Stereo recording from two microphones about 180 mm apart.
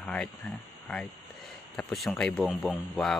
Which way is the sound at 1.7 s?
Centre (ahead or behind).